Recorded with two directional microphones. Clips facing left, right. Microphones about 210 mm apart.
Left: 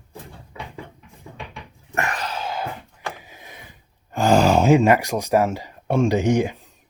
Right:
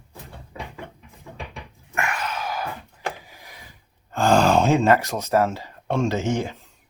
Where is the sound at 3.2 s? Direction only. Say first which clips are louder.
Left 3 dB; 20° left (ahead or behind).